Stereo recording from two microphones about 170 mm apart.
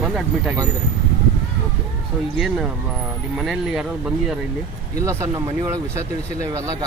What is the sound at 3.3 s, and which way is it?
Speech, centre (ahead or behind).